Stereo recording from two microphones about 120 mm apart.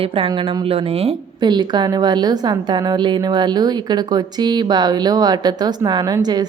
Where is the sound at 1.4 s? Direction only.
35° right (ahead or behind).